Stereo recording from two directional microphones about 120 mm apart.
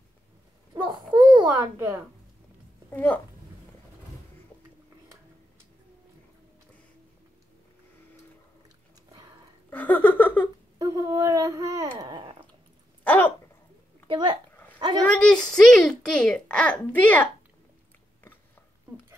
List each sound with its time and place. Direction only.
0.8 s a sound: 40° right (ahead or behind)
1.4 s a child's voice: 25° right (ahead or behind)
2.9 s speech: 15° left (ahead or behind)
9.7 s laughter: 15° left (ahead or behind)
10.8 s speech: 30° right (ahead or behind)
12.0 s dog: 35° right (ahead or behind)
13.0 s a sound: 15° left (ahead or behind)
14.0 s speech: 40° right (ahead or behind)
15.1 s a child's voice: 5° left (ahead or behind)